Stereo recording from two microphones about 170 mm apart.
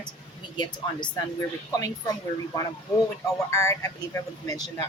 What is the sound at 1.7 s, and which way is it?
Speech, 20° left (ahead or behind).